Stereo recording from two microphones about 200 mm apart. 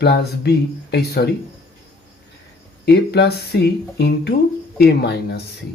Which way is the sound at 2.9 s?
55° left (ahead or behind).